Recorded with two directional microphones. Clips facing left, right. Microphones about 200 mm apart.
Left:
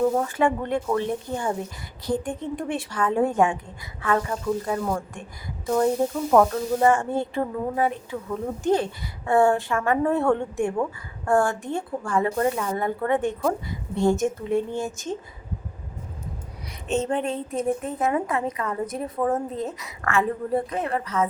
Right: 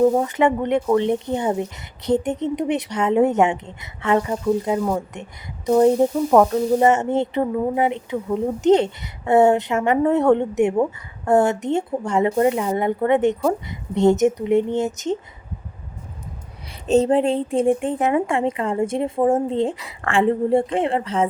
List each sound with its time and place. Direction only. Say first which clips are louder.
0.0 s speech: right 5 dB; 15° right (ahead or behind)
16.8 s a woman's voice: right 8 dB; 35° right (ahead or behind)